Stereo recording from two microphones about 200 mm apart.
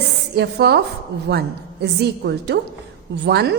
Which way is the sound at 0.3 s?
55° right (ahead or behind).